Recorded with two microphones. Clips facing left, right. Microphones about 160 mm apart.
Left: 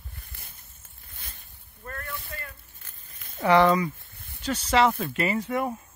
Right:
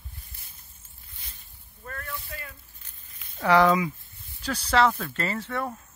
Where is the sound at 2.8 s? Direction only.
45° left (ahead or behind).